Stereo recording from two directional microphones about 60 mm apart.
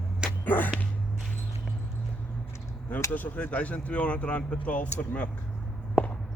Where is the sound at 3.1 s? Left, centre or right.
Left.